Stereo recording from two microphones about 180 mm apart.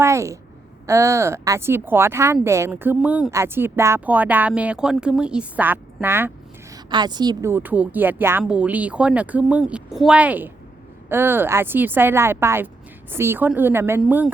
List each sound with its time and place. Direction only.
0.0 s speech: 15° right (ahead or behind)
7.5 s speech: 10° right (ahead or behind)